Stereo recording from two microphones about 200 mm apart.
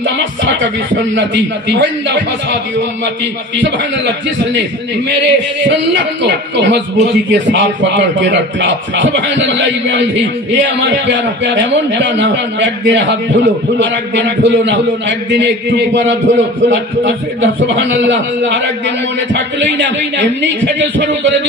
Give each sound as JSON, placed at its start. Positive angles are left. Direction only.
{"t": 1.1, "sound": "a man's voice", "side_deg": -60}
{"t": 5.2, "sound": "a man's voice", "side_deg": -65}